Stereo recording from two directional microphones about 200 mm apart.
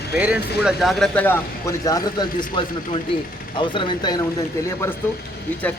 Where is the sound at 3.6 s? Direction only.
25° left (ahead or behind).